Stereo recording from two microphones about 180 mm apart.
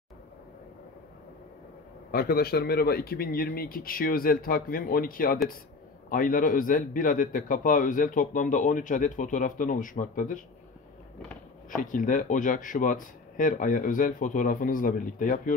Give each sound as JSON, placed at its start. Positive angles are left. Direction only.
{"t": 2.0, "sound": "a man's voice", "side_deg": 55}
{"t": 11.7, "sound": "a man's voice", "side_deg": 50}